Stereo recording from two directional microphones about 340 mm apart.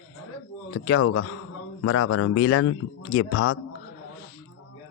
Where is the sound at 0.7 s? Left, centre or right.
Left.